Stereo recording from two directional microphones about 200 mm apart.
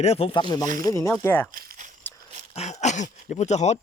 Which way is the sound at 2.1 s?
10° left (ahead or behind).